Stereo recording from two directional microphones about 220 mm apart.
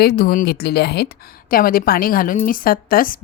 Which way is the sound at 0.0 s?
45° left (ahead or behind).